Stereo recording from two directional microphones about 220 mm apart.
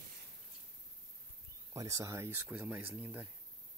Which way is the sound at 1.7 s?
15° right (ahead or behind).